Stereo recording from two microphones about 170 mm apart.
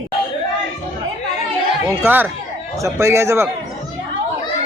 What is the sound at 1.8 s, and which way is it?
A man's voice, 10° right (ahead or behind).